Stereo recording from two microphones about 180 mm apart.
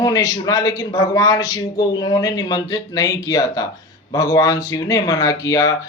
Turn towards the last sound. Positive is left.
turn(degrees=20)  # may be behind; listen again after turning